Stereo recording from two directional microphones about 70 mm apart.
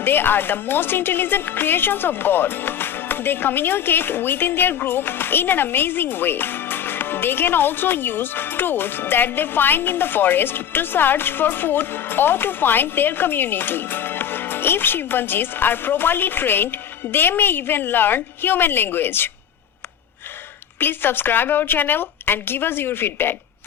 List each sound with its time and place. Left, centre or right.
0.0 s a woman's voice: left
20.7 s a woman's voice: left